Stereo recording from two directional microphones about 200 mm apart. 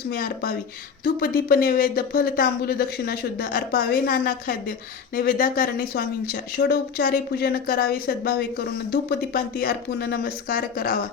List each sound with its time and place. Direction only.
0.1 s speech: 45° left (ahead or behind)